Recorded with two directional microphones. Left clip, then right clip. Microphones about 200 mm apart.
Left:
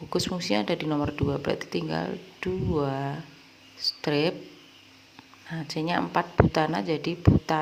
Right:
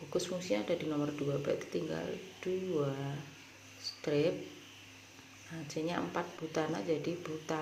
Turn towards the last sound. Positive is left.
turn(degrees=25)  # may be behind; listen again after turning